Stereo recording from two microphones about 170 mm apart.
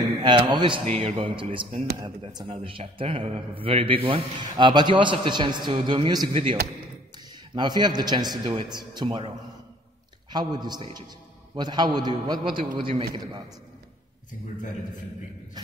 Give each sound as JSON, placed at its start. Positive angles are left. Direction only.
{"t": 0.2, "sound": "a man's voice", "side_deg": -25}
{"t": 0.8, "sound": "a man's voice", "side_deg": -35}
{"t": 7.5, "sound": "a man's voice", "side_deg": -25}
{"t": 10.3, "sound": "a man's voice", "side_deg": -25}